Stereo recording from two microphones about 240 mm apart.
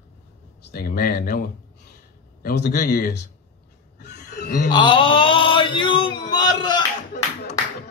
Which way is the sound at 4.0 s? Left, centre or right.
Left.